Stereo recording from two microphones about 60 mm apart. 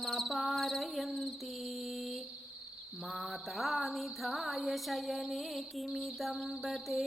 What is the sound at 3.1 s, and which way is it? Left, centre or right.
Music, centre.